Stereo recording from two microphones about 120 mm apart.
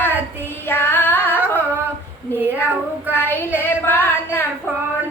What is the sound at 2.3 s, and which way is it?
Child singing, 15° right (ahead or behind).